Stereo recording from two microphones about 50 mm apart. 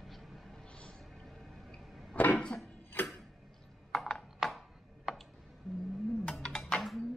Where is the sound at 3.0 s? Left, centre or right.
Left.